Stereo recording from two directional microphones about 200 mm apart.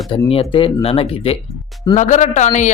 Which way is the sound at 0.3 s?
25° left (ahead or behind).